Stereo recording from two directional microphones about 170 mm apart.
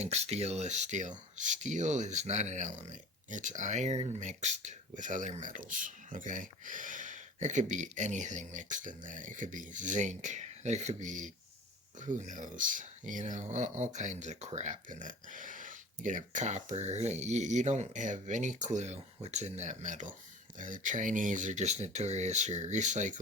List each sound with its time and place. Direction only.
0.0 s speech: 40° right (ahead or behind)